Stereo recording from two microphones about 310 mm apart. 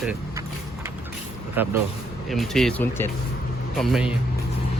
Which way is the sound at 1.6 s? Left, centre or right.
Centre.